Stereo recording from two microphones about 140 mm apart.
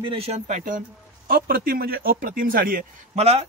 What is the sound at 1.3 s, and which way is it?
Speech, 90° right.